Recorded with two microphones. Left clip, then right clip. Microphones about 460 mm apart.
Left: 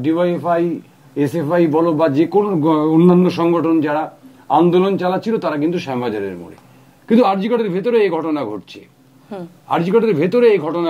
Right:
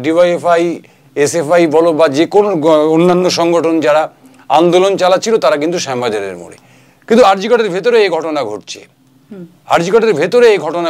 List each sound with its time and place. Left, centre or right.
0.0 s speech: right
1.1 s a man's voice: right